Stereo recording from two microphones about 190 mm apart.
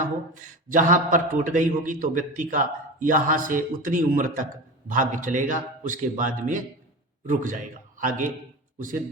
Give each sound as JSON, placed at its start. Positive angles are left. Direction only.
{"t": 0.7, "sound": "a man's voice", "side_deg": -45}